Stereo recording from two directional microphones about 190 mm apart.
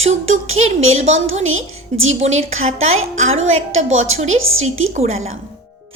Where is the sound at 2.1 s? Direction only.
35° right (ahead or behind).